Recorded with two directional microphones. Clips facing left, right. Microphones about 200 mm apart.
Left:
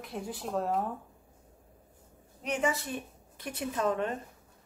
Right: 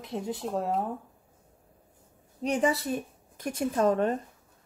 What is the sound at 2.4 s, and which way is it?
A woman's voice, 35° right (ahead or behind).